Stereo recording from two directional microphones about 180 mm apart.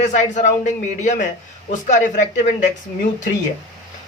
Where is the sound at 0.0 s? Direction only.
45° left (ahead or behind).